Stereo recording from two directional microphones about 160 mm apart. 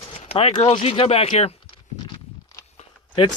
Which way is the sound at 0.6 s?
40° left (ahead or behind).